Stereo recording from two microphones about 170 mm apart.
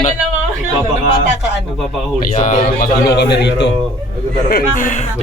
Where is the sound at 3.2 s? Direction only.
80° left.